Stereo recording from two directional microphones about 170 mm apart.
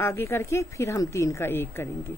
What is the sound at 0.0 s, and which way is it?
A woman's voice, 15° left (ahead or behind).